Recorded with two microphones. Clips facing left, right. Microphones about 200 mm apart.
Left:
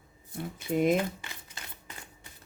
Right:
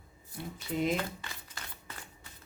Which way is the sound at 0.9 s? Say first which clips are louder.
Left 6 dB; 15° left (ahead or behind).